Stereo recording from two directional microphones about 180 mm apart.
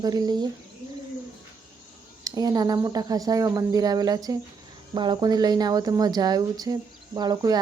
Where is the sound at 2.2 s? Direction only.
20° right (ahead or behind).